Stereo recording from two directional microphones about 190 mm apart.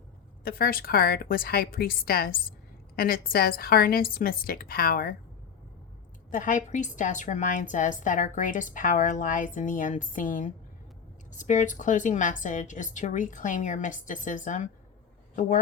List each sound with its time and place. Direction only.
0.4 s a woman's voice: 50° left (ahead or behind)
6.3 s a woman's voice: 45° left (ahead or behind)